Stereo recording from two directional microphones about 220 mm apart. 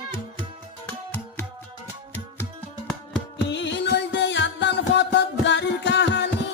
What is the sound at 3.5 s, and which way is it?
Music, 55° left (ahead or behind).